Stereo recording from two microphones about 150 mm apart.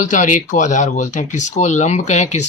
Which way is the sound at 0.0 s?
55° left (ahead or behind).